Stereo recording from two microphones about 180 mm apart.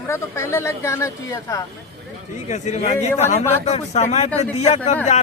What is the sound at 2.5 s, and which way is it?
A man's voice, 40° left (ahead or behind).